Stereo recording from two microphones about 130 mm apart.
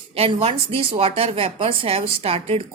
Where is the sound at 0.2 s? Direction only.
50° right (ahead or behind).